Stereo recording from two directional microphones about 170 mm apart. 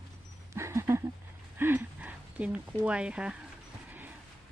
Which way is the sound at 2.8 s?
5° right (ahead or behind).